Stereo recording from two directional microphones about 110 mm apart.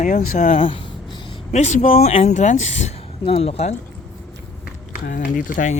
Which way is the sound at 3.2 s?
65° left (ahead or behind).